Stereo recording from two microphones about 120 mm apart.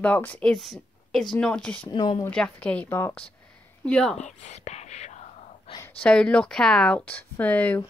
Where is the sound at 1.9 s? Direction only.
40° left (ahead or behind).